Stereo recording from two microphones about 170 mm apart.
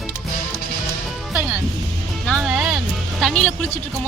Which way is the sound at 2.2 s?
Centre (ahead or behind).